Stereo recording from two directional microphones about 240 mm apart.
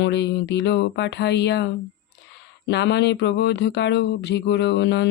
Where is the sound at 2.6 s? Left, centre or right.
Left.